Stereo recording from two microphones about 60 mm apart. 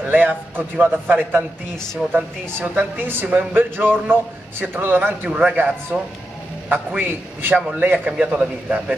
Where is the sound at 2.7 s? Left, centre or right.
Right.